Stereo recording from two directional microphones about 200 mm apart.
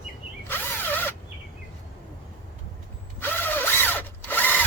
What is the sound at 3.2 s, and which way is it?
Drill, 10° left (ahead or behind).